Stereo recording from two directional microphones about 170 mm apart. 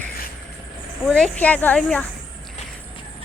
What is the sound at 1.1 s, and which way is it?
Speech, 5° left (ahead or behind).